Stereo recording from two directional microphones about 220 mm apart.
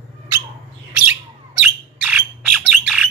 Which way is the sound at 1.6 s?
5° right (ahead or behind).